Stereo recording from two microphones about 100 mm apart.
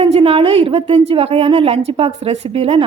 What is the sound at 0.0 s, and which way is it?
A woman's voice, 70° right (ahead or behind).